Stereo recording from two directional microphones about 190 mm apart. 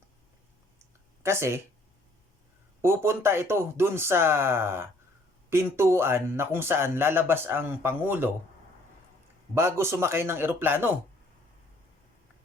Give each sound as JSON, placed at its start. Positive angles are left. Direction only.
{"t": 1.2, "sound": "speech", "side_deg": -15}
{"t": 2.8, "sound": "speech", "side_deg": -15}
{"t": 9.6, "sound": "speech", "side_deg": -15}